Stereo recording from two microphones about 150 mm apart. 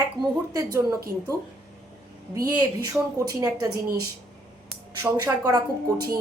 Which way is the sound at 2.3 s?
25° right (ahead or behind).